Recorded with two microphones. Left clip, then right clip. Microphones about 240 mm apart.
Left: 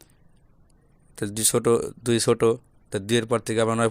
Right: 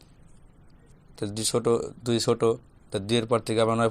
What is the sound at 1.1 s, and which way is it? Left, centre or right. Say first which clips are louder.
Speech: left 3 dB; left.